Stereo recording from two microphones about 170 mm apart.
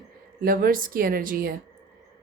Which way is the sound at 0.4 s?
60° right (ahead or behind).